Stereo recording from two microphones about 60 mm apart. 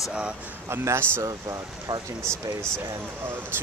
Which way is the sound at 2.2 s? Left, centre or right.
Centre.